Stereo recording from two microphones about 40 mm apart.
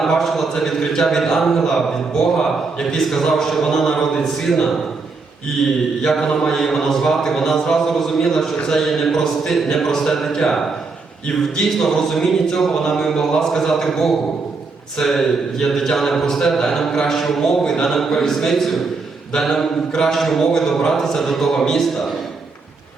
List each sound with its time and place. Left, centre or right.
0.0 s speech: centre
3.0 s speech: centre
6.1 s speech: centre
11.5 s speech: centre